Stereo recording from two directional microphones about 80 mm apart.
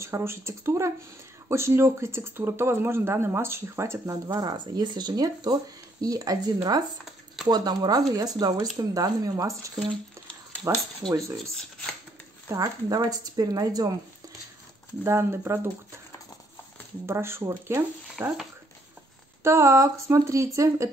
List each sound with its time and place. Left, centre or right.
0.0 s speech: right
4.3 s speech: right
11.1 s speech: right
12.4 s speech: right
15.0 s speech: right
17.0 s speech: right
19.4 s speech: right